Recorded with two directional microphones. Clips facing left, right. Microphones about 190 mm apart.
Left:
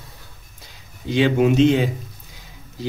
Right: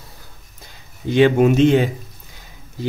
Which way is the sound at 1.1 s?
50° right (ahead or behind).